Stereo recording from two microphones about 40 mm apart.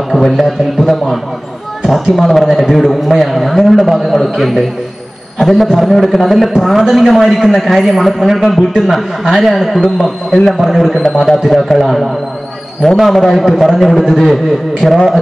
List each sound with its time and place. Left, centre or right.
0.1 s a man's voice: centre
10.0 s a man's voice: centre